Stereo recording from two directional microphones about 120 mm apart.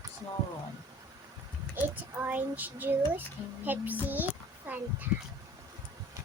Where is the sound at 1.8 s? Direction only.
15° right (ahead or behind).